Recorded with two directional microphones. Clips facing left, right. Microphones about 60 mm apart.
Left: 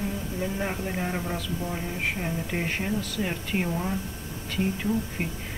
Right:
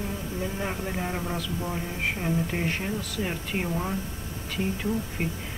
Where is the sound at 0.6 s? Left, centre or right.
Centre.